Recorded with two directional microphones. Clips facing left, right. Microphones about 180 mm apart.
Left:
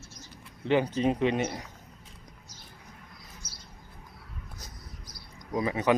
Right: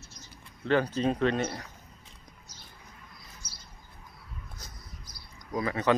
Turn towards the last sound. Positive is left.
turn(degrees=15)  # may be behind; listen again after turning